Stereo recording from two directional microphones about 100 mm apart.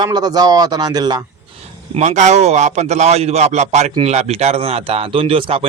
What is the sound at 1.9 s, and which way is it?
A man's voice, 90° right.